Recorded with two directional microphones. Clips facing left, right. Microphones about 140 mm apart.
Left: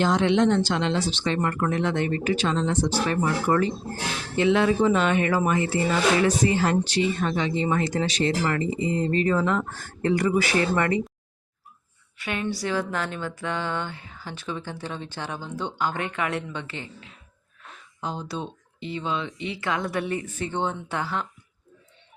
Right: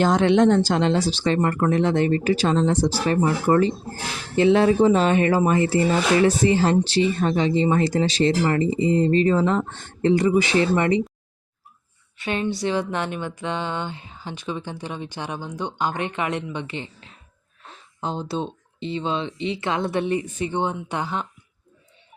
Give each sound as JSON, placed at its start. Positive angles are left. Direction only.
{"t": 0.0, "sound": "speech", "side_deg": -50}
{"t": 12.1, "sound": "speech", "side_deg": -25}
{"t": 17.6, "sound": "speech", "side_deg": -30}